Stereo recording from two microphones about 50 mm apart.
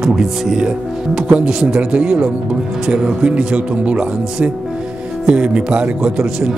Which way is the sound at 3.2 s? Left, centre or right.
Right.